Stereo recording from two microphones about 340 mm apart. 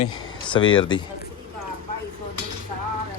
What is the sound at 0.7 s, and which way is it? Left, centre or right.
Speech, centre.